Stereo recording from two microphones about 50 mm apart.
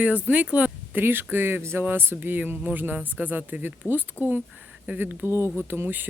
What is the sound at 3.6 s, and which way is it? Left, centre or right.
Speech, right.